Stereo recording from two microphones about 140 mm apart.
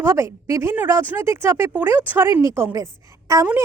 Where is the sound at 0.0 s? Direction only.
20° right (ahead or behind).